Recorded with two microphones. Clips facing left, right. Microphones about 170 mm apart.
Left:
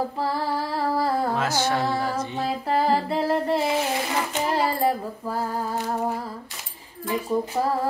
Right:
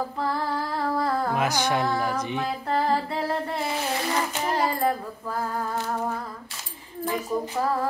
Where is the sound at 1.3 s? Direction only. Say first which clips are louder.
Even; 15° right (ahead or behind).